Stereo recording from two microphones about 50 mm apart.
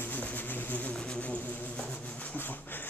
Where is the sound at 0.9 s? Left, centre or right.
Centre.